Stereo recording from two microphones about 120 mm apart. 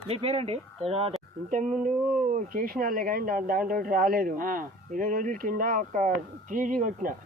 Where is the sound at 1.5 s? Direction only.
90° right.